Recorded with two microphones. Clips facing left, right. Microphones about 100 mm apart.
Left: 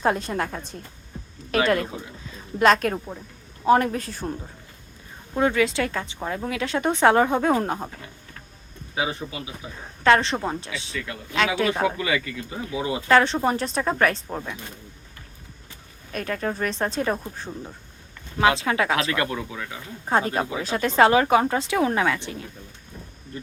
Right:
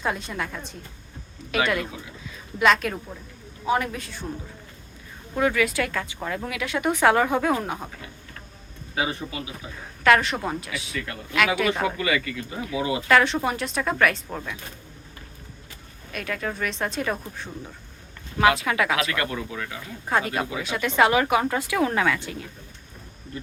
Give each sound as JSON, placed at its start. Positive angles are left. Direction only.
{"t": 0.0, "sound": "speech", "side_deg": 40}
{"t": 5.4, "sound": "speech", "side_deg": 25}
{"t": 9.5, "sound": "speech", "side_deg": 25}
{"t": 16.1, "sound": "speech", "side_deg": 35}
{"t": 18.3, "sound": "speech", "side_deg": 25}
{"t": 19.7, "sound": "speech", "side_deg": 30}